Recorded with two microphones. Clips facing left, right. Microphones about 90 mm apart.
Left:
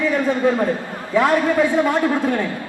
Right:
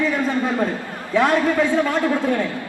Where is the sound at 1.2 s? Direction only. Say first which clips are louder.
Left 1 dB; 20° left (ahead or behind).